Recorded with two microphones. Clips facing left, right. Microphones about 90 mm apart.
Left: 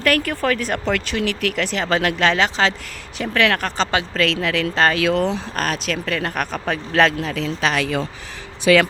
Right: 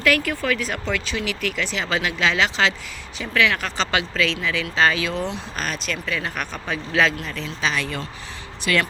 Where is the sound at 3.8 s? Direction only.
30° left (ahead or behind).